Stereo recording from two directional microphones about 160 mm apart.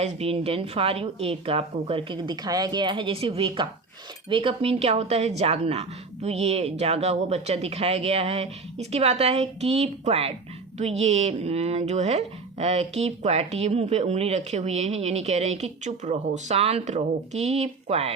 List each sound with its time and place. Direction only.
0.0 s a woman's voice: 40° right (ahead or behind)